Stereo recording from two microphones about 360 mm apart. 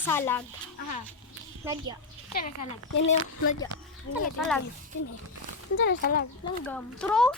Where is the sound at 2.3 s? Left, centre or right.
Left.